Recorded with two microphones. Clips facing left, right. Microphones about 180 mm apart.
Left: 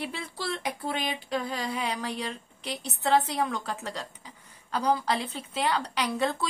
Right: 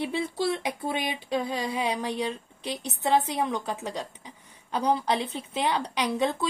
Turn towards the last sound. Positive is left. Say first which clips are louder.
# right 2 dB
turn(degrees=-20)  # may be behind; listen again after turning